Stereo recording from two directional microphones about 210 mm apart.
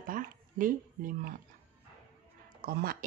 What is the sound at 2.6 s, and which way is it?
Speech, 45° right (ahead or behind).